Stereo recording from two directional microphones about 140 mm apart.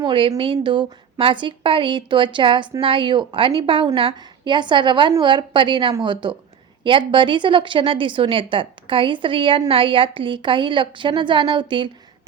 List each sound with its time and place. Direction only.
0.0 s a woman's voice: 35° right (ahead or behind)